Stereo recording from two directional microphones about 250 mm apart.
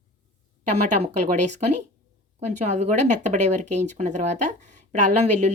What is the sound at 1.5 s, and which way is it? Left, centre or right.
Speech, right.